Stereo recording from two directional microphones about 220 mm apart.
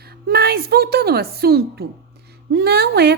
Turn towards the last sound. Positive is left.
turn(degrees=-45)  # may be behind; listen again after turning